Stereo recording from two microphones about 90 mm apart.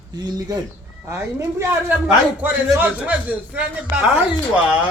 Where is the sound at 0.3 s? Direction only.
45° right (ahead or behind).